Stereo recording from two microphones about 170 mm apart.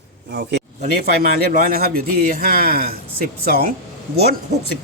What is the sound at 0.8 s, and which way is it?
A man's voice, 65° right (ahead or behind).